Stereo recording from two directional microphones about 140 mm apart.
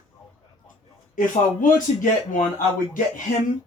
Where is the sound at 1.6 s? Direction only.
75° left (ahead or behind).